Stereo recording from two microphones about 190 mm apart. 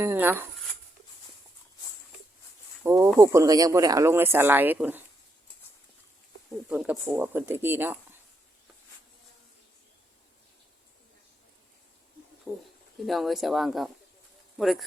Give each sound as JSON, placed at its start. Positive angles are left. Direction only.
{"t": 0.0, "sound": "speech", "side_deg": -10}
{"t": 2.8, "sound": "speech", "side_deg": -15}
{"t": 6.5, "sound": "speech", "side_deg": -5}
{"t": 12.5, "sound": "speech", "side_deg": 0}